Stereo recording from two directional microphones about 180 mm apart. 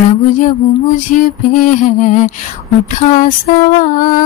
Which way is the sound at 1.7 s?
45° left (ahead or behind).